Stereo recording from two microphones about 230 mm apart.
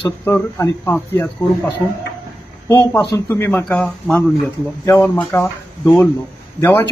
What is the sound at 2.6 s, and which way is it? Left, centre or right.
A man's voice, centre.